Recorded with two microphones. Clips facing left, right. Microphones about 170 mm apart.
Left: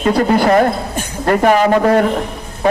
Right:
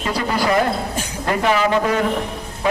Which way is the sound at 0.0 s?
50° left (ahead or behind).